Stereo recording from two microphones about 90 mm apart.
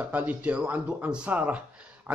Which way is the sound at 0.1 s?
20° right (ahead or behind).